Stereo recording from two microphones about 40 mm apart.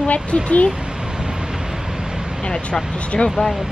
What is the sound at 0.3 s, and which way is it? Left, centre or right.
Speech, left.